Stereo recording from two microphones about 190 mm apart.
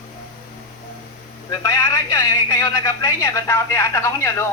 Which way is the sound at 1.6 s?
15° left (ahead or behind).